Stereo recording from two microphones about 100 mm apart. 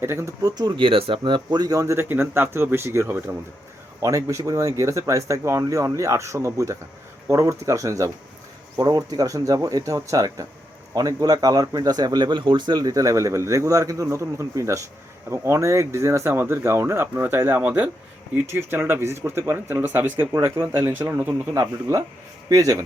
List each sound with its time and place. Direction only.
0.0 s speech: 25° right (ahead or behind)
0.4 s speech: 45° right (ahead or behind); by 17.6 s 25° right (ahead or behind)
17.6 s speech: 10° right (ahead or behind)
18.5 s speech: 25° right (ahead or behind)
21.5 s speech: 35° right (ahead or behind)